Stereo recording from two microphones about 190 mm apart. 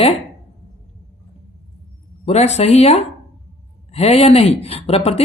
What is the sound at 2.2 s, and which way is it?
Speech, 35° left (ahead or behind).